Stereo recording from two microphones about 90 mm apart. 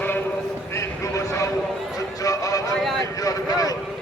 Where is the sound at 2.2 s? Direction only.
40° left (ahead or behind).